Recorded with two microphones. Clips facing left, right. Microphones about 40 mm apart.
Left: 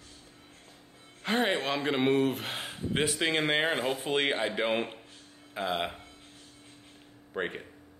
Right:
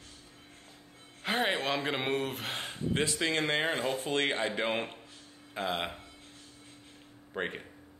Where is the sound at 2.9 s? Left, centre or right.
Centre.